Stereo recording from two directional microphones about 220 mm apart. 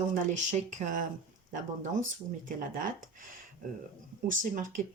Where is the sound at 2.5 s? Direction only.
40° right (ahead or behind).